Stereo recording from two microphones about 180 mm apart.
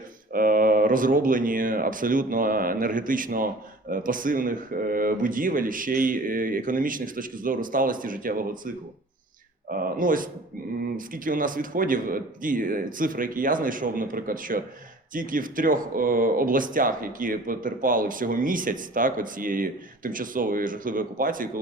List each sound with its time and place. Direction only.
0.3 s speech: 50° right (ahead or behind)